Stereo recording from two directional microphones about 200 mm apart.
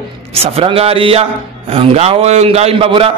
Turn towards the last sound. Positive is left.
turn(degrees=-25)  # may be behind; listen again after turning